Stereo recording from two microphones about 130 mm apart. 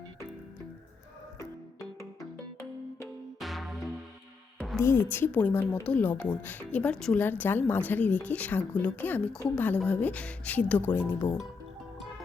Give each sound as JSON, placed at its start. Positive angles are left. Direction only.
{"t": 3.4, "sound": "music", "side_deg": 0}
{"t": 4.8, "sound": "speech", "side_deg": 20}